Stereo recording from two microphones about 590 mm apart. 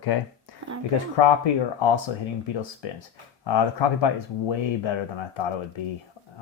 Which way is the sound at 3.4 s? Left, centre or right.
Left.